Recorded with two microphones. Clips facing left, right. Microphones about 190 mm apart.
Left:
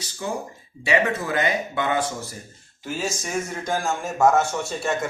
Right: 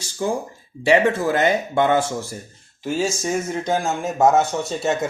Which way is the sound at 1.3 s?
30° right (ahead or behind).